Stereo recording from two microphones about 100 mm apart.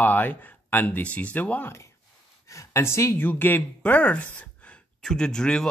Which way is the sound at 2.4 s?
30° left (ahead or behind).